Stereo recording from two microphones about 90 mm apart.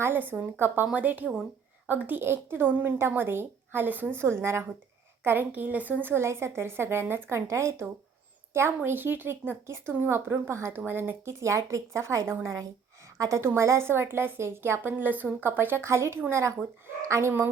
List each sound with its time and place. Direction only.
0.0 s a woman's voice: 20° right (ahead or behind)
11.3 s a woman's voice: 35° right (ahead or behind)